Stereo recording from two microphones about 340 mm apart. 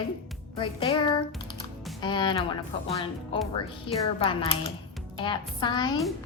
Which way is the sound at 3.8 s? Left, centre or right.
Centre.